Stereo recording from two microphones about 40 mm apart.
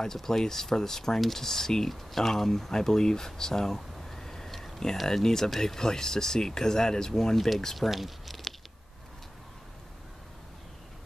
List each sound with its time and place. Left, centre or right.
0.0 s speech: centre
7.7 s speech: centre